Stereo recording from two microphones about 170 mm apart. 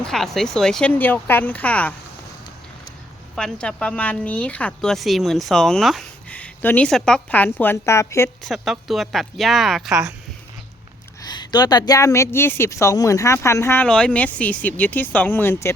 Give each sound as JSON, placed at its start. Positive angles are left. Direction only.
{"t": 0.0, "sound": "a woman's voice", "side_deg": 5}
{"t": 3.3, "sound": "a woman's voice", "side_deg": 5}
{"t": 8.4, "sound": "speech", "side_deg": 0}
{"t": 9.9, "sound": "speech", "side_deg": -20}
{"t": 11.2, "sound": "a woman's voice", "side_deg": 25}
{"t": 13.8, "sound": "a woman's voice", "side_deg": 5}